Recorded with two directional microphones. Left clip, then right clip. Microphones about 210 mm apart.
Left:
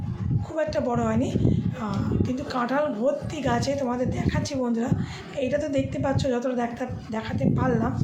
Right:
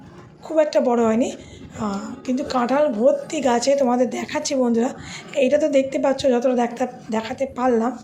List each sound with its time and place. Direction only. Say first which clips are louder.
0.5 s a woman's voice: right 8 dB; 35° right (ahead or behind)